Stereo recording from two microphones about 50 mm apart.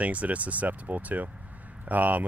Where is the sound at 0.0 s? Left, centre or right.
Right.